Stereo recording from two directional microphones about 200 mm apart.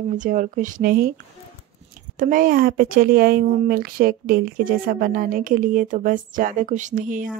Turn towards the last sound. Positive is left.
turn(degrees=-40)  # may be behind; listen again after turning